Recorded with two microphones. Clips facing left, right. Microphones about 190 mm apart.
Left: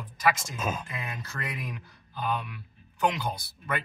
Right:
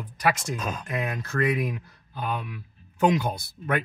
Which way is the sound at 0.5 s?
5° left (ahead or behind).